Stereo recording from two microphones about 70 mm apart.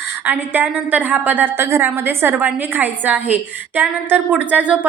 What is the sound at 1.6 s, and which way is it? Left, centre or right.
A woman's voice, right.